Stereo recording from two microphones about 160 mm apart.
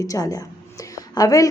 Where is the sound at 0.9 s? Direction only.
20° left (ahead or behind).